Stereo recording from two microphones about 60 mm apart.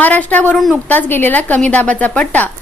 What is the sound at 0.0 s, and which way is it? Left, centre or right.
Speech, left.